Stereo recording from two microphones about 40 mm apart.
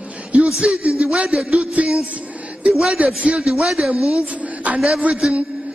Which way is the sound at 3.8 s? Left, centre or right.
Right.